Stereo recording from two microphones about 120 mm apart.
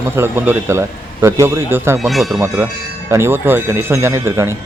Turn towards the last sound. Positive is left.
turn(degrees=-20)  # may be behind; listen again after turning